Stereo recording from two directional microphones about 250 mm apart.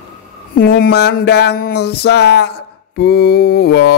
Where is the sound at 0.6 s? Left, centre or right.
Left.